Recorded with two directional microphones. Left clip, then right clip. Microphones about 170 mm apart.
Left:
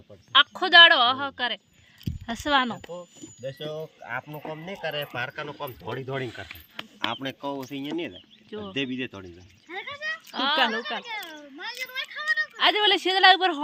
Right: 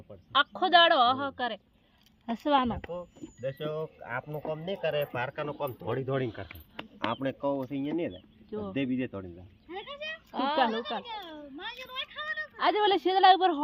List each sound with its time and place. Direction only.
0.3 s a woman's voice: 10° left (ahead or behind)
2.7 s a woman's voice: 10° left (ahead or behind)
3.2 s speech: 5° right (ahead or behind)
4.0 s speech: 50° right (ahead or behind)
6.5 s a sound: 30° right (ahead or behind)
7.1 s speech: 45° right (ahead or behind)
9.6 s a sound: centre (ahead or behind)
10.3 s speech: 10° right (ahead or behind)
10.6 s speech: 5° left (ahead or behind)
11.6 s a sound: centre (ahead or behind)
12.5 s a woman's voice: 15° left (ahead or behind)